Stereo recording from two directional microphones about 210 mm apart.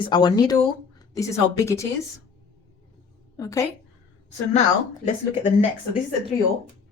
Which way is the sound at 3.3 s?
15° left (ahead or behind).